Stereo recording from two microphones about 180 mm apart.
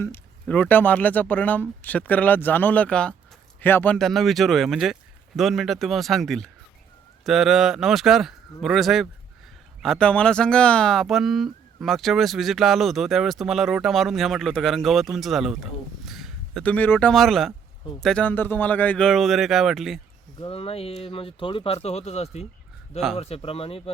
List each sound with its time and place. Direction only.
0.0 s speech: 10° left (ahead or behind)
20.4 s speech: 30° left (ahead or behind)